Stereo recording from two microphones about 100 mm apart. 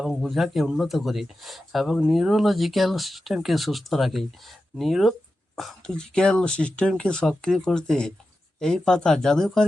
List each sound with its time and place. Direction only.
0.0 s speech: 5° right (ahead or behind)